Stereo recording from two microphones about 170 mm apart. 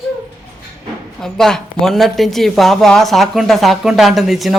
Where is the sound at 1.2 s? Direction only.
5° left (ahead or behind).